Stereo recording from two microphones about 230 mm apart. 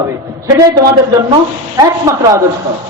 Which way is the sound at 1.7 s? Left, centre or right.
Centre.